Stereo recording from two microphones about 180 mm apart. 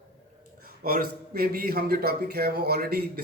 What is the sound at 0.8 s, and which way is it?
A man's voice, 55° right (ahead or behind).